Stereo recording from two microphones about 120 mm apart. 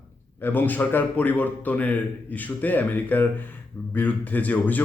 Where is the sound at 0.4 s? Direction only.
15° left (ahead or behind).